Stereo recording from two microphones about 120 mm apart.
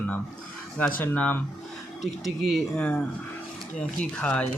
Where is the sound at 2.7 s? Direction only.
10° left (ahead or behind).